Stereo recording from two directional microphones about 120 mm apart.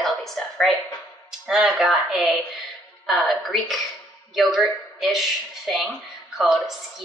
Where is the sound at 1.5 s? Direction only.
5° right (ahead or behind).